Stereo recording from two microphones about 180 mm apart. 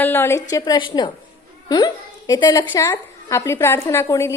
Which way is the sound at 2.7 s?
15° left (ahead or behind).